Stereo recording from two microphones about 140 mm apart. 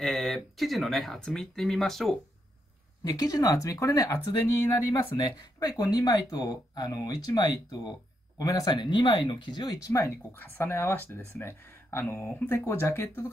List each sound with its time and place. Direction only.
0.0 s speech: centre (ahead or behind)
3.0 s speech: 25° left (ahead or behind)